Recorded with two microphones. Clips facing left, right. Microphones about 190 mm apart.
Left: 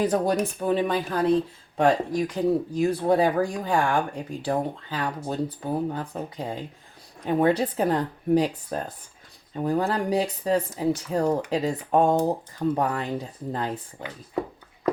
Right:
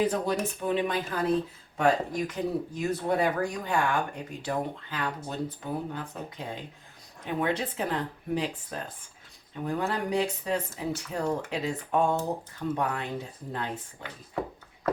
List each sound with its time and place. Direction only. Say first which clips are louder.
0.0 s speech: left 4 dB; 40° left (ahead or behind)